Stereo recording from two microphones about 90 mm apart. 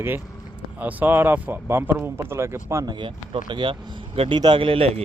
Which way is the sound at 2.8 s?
60° right (ahead or behind).